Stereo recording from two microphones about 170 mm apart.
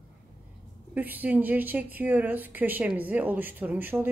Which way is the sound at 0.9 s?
10° right (ahead or behind).